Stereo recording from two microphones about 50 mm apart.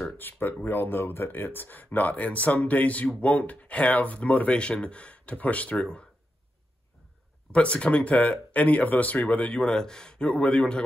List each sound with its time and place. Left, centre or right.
0.2 s speech: left
4.5 s speech: centre
7.5 s speech: left
9.3 s a man's voice: left